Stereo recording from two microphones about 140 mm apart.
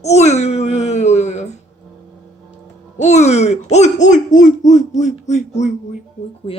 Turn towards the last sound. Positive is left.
turn(degrees=40)  # may be behind; listen again after turning